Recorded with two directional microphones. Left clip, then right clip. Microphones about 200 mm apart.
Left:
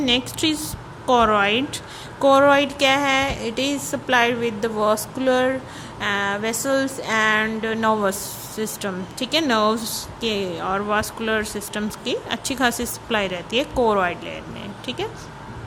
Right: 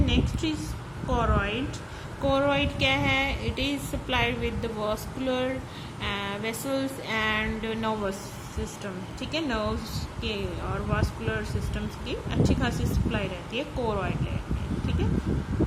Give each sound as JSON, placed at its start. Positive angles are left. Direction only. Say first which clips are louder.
{"t": 0.0, "sound": "a woman's voice", "louder": "left 8 dB", "side_deg": 30}
{"t": 2.2, "sound": "a sound", "louder": "left 10 dB", "side_deg": 25}
{"t": 8.8, "sound": "speech", "louder": "left 9 dB", "side_deg": 30}